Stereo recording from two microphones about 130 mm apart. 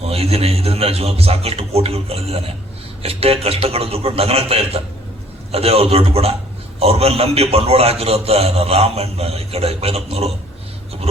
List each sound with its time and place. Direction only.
0.0 s a man's voice: 50° right (ahead or behind)